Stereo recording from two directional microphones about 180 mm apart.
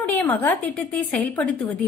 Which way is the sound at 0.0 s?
10° left (ahead or behind).